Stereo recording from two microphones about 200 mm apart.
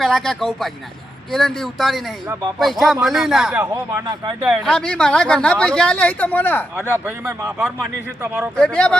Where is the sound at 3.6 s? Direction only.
15° right (ahead or behind).